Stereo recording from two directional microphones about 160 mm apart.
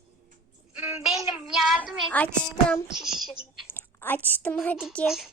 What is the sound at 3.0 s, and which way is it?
Speech, 5° right (ahead or behind).